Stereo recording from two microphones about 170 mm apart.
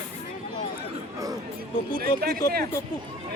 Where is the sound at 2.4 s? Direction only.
20° left (ahead or behind).